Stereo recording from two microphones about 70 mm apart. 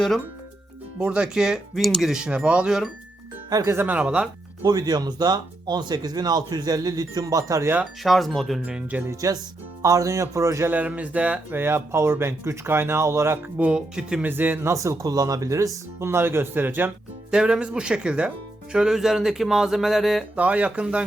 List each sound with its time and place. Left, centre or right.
0.9 s speech: centre
3.5 s speech: right
3.8 s speech: centre
4.6 s speech: right
8.0 s speech: centre
8.6 s speech: centre
9.2 s speech: right
10.7 s speech: right
11.5 s speech: right
13.6 s speech: centre
14.2 s speech: right
14.7 s speech: right
17.3 s speech: centre
20.3 s speech: centre